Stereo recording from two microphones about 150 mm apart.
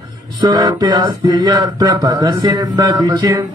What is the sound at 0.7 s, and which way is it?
Speech, 25° right (ahead or behind).